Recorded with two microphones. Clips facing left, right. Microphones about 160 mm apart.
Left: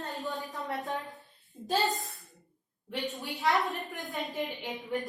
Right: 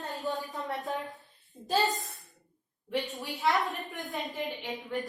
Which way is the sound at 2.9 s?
Centre (ahead or behind).